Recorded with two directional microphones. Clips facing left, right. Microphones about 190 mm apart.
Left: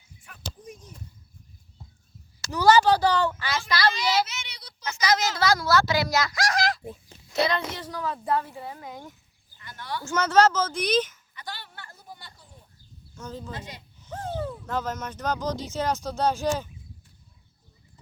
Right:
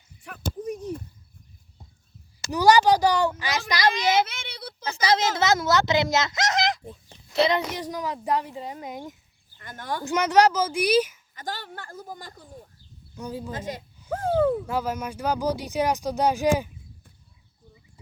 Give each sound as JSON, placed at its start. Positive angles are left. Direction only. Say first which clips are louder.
{"t": 0.2, "sound": "a sound", "louder": "right 10 dB", "side_deg": -60}
{"t": 2.4, "sound": "speech", "louder": "right 1 dB", "side_deg": -15}
{"t": 4.3, "sound": "child singing", "louder": "right 5 dB", "side_deg": -55}
{"t": 4.8, "sound": "speech", "louder": "right 2 dB", "side_deg": -30}
{"t": 9.6, "sound": "speech", "louder": "right 3 dB", "side_deg": -50}
{"t": 10.0, "sound": "speech", "louder": "right 1 dB", "side_deg": -15}
{"t": 11.3, "sound": "speech", "louder": "right 6 dB", "side_deg": -45}
{"t": 13.1, "sound": "speech", "louder": "right 4 dB", "side_deg": -15}
{"t": 13.5, "sound": "speech", "louder": "right 6 dB", "side_deg": -45}
{"t": 14.1, "sound": "a sound", "louder": "right 10 dB", "side_deg": -55}
{"t": 14.7, "sound": "speech", "louder": "right 3 dB", "side_deg": -10}